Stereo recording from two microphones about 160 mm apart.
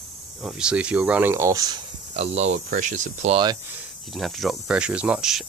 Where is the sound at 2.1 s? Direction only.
40° right (ahead or behind).